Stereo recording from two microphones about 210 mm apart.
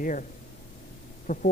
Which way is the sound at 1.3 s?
40° left (ahead or behind).